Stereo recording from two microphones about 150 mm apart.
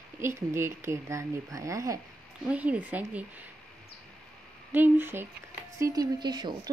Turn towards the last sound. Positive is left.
turn(degrees=-30)  # may be behind; listen again after turning